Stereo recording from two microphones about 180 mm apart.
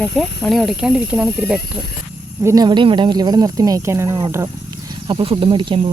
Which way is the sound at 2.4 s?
20° right (ahead or behind).